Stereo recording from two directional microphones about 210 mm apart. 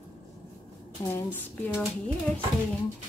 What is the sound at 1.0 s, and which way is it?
Speech, 15° left (ahead or behind).